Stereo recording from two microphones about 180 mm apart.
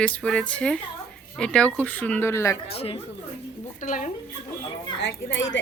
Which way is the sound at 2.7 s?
35° left (ahead or behind).